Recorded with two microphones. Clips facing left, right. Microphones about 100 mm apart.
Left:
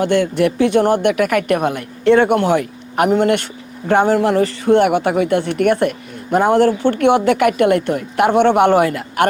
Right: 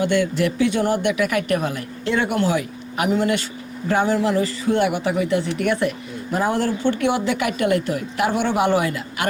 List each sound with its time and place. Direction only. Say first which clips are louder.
0.0 s speech: left 4 dB; 55° left (ahead or behind)